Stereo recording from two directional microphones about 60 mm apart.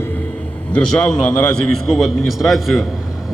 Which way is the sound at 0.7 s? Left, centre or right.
Centre.